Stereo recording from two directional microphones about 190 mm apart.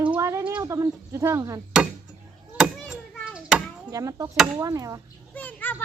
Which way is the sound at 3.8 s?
20° right (ahead or behind).